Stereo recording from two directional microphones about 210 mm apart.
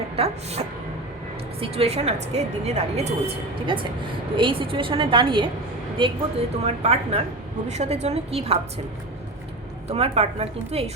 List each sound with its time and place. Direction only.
0.2 s speech: 30° right (ahead or behind)
1.6 s a woman's voice: 30° right (ahead or behind)
9.9 s a woman's voice: 30° right (ahead or behind)